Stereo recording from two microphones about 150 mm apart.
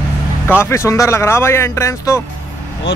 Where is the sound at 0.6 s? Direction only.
20° left (ahead or behind).